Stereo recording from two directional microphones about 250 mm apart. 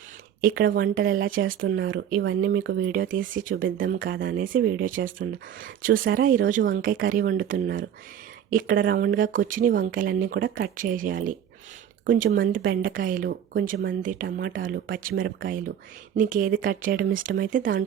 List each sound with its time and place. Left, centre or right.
0.4 s speech: right
3.9 s speech: right